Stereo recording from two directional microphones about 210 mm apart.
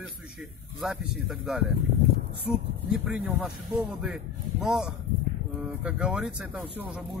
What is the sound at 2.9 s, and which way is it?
Speech, 5° right (ahead or behind).